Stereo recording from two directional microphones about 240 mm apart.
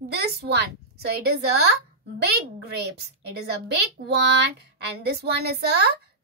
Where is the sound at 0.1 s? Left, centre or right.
Right.